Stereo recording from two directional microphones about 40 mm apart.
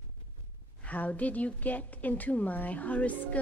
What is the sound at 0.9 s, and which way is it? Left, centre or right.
Music, left.